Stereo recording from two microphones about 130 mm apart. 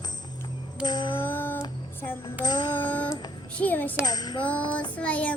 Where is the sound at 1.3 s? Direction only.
15° left (ahead or behind).